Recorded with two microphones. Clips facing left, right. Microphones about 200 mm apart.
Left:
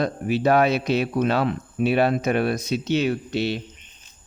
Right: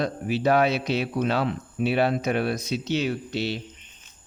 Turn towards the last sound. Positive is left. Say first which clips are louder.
# left 4 dB
turn(degrees=55)  # may be behind; listen again after turning